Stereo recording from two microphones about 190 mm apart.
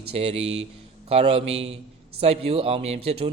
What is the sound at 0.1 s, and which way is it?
A man's voice, 30° right (ahead or behind).